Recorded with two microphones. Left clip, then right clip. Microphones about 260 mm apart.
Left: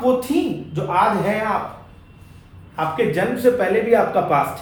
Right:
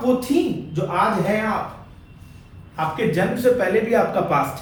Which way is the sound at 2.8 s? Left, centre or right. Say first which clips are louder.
Left 2 dB; left.